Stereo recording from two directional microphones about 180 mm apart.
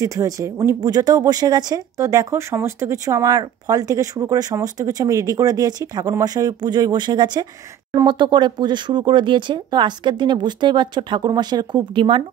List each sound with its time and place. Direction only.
0.0 s speech: 15° right (ahead or behind)